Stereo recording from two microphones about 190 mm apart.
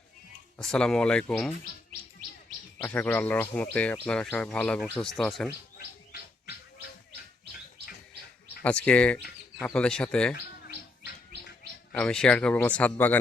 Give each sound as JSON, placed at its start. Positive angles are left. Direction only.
{"t": 0.6, "sound": "speech", "side_deg": 5}
{"t": 2.8, "sound": "speech", "side_deg": 10}
{"t": 5.7, "sound": "bird", "side_deg": 55}
{"t": 8.6, "sound": "speech", "side_deg": 5}
{"t": 11.9, "sound": "speech", "side_deg": 5}